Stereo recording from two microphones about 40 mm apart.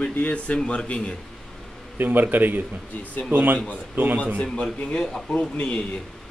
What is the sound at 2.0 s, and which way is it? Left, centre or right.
Speech, right.